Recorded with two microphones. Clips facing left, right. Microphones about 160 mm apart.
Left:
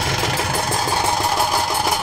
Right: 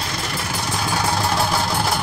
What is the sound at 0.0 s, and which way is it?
Vehicle, 85° left.